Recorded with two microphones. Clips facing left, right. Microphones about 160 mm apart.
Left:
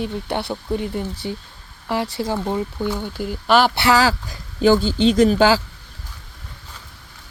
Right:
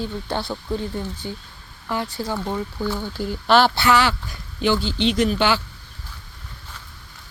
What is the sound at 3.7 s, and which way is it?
Speech, 35° left (ahead or behind).